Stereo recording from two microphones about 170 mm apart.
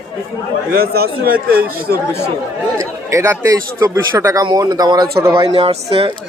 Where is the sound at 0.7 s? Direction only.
65° right (ahead or behind).